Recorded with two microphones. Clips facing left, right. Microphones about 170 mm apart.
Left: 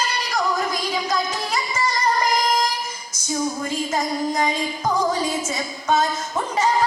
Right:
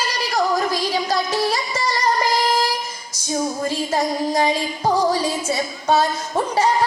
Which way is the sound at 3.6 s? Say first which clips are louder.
Right 3 dB; 30° right (ahead or behind).